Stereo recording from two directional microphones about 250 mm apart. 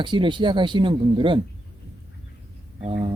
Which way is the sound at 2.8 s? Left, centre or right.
Right.